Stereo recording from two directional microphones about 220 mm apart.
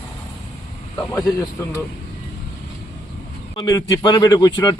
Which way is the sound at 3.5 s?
20° left (ahead or behind).